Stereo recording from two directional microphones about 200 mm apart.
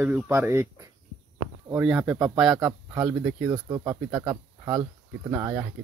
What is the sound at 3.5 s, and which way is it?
Speech, 20° right (ahead or behind).